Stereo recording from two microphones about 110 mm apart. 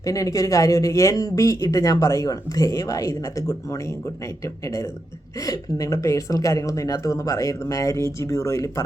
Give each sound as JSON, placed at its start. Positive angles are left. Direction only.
{"t": 0.0, "sound": "speech", "side_deg": 30}